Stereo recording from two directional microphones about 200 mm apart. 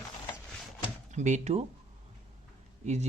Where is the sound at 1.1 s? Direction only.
35° right (ahead or behind).